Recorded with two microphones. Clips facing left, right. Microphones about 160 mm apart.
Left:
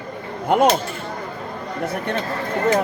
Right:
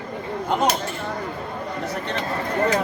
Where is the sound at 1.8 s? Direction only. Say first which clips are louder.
Left 6 dB; 55° left (ahead or behind).